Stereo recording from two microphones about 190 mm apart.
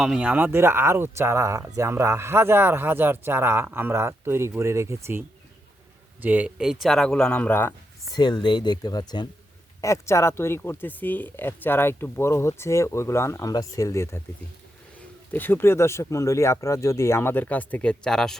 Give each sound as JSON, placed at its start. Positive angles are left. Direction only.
{"t": 0.0, "sound": "speech", "side_deg": -5}
{"t": 6.2, "sound": "speech", "side_deg": -10}
{"t": 8.1, "sound": "speech", "side_deg": 20}
{"t": 15.3, "sound": "speech", "side_deg": 10}